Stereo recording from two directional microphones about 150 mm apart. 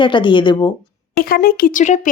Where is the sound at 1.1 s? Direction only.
85° left; by 2.0 s 55° left (ahead or behind).